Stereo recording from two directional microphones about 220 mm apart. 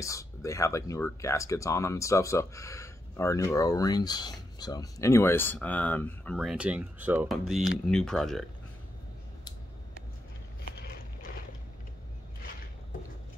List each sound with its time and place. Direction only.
0.0 s speech: 15° left (ahead or behind)